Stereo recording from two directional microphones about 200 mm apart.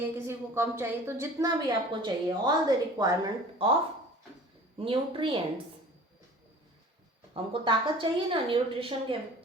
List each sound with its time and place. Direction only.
0.1 s a woman's voice: 15° right (ahead or behind)
4.8 s a woman's voice: 25° right (ahead or behind)
7.3 s a woman's voice: 25° right (ahead or behind)